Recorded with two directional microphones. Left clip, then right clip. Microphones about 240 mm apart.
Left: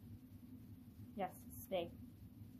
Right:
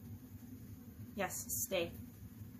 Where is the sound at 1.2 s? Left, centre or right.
Right.